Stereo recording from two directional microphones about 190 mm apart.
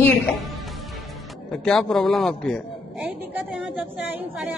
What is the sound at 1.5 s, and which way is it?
A man's voice, 5° left (ahead or behind).